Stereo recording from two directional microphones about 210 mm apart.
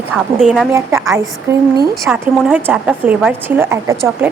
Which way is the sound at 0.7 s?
10° right (ahead or behind).